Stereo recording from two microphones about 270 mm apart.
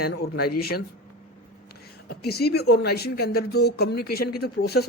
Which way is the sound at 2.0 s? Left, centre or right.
Left.